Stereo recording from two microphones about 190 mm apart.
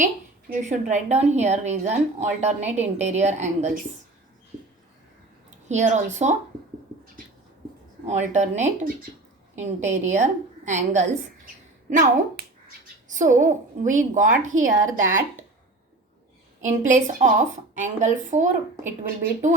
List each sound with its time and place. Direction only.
0.5 s a woman's voice: 40° right (ahead or behind)
5.6 s a woman's voice: 40° right (ahead or behind)
8.0 s a woman's voice: 35° right (ahead or behind)
16.6 s a woman's voice: 40° right (ahead or behind)